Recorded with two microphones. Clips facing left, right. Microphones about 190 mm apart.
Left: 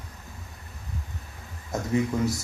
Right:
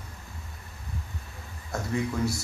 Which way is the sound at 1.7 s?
20° left (ahead or behind).